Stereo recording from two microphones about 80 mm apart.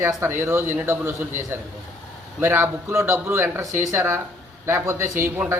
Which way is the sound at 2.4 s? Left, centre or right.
Right.